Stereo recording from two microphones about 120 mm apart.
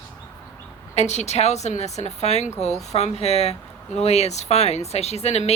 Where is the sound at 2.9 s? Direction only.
65° left (ahead or behind).